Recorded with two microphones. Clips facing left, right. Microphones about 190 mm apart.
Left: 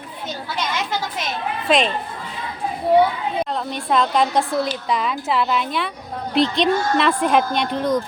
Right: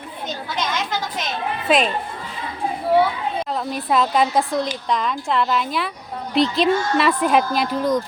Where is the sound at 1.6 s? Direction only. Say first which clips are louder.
Even; 5° right (ahead or behind).